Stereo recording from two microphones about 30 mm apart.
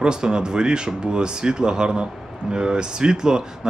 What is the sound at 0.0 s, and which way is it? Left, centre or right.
Speech, right.